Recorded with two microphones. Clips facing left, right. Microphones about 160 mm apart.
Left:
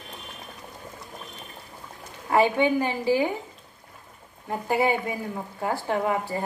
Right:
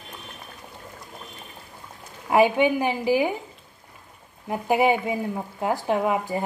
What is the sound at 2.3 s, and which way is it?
A woman's voice, 15° right (ahead or behind).